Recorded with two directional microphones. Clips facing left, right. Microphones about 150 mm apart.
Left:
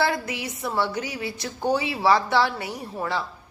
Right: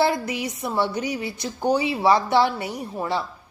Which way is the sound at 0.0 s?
20° right (ahead or behind).